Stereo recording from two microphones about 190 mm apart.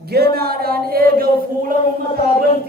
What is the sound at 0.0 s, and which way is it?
Speech, 55° right (ahead or behind).